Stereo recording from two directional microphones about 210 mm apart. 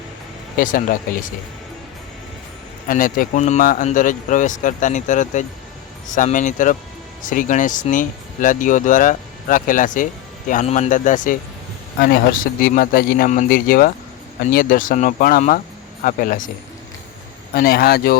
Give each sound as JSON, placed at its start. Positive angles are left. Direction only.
{"t": 0.6, "sound": "speech", "side_deg": 40}
{"t": 2.8, "sound": "speech", "side_deg": 40}
{"t": 17.5, "sound": "speech", "side_deg": 45}